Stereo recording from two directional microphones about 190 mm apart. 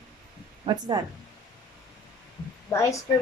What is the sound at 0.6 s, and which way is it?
Speech, 20° right (ahead or behind).